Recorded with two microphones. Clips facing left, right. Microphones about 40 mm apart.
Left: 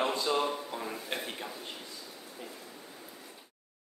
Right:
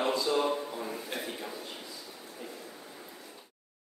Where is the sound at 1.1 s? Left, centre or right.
Left.